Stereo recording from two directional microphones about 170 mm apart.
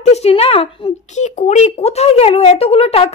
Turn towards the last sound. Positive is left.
turn(degrees=35)  # may be behind; listen again after turning